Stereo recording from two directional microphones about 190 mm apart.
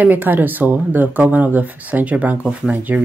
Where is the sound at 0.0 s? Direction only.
10° right (ahead or behind).